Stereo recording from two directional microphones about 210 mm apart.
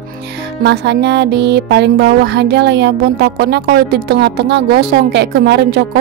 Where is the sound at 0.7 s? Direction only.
55° right (ahead or behind).